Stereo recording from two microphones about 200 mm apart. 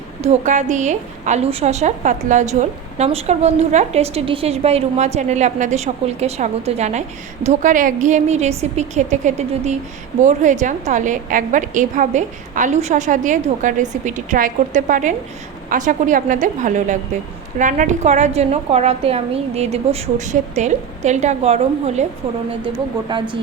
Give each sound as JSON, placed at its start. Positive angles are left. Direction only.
{"t": 0.3, "sound": "a woman's voice", "side_deg": -35}
{"t": 23.1, "sound": "a woman's voice", "side_deg": -20}